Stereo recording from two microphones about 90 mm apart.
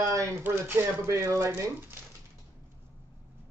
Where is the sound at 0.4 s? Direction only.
25° right (ahead or behind).